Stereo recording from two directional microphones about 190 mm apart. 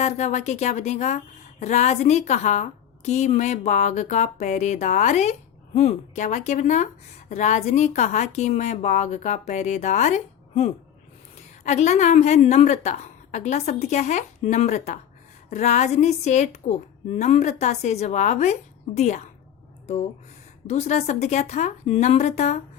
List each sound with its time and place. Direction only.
0.0 s speech: 35° left (ahead or behind)
20.7 s speech: 35° left (ahead or behind)